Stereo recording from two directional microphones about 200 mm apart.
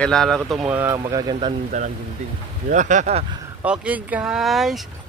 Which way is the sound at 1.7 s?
35° right (ahead or behind).